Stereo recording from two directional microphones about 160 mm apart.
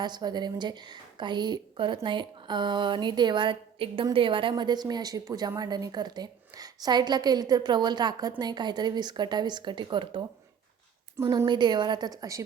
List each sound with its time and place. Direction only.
0.0 s a woman's voice: 25° right (ahead or behind)